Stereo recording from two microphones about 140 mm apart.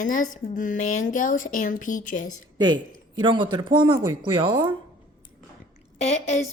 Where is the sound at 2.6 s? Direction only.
30° right (ahead or behind).